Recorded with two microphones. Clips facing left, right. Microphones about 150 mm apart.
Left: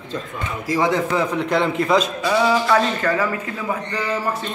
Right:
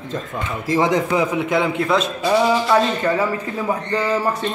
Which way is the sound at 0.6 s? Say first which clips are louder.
Right 2 dB; 25° right (ahead or behind).